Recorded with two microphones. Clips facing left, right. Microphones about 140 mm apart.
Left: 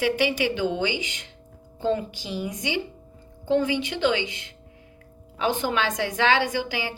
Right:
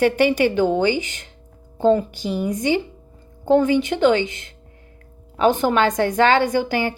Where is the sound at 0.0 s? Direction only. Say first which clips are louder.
Right 7 dB; 50° right (ahead or behind).